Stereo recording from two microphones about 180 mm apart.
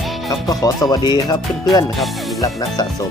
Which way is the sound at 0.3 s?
20° left (ahead or behind).